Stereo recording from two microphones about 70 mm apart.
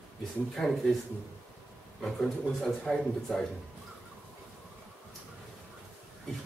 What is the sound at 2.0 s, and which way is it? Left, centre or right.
Speech, centre.